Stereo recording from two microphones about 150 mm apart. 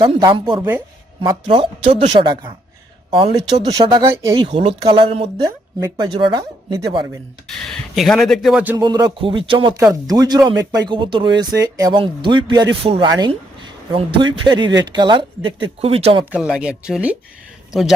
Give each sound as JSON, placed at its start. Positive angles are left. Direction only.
{"t": 0.3, "sound": "speech", "side_deg": -35}
{"t": 7.4, "sound": "speech", "side_deg": 0}
{"t": 8.8, "sound": "speech", "side_deg": -30}
{"t": 16.3, "sound": "a man's voice", "side_deg": -5}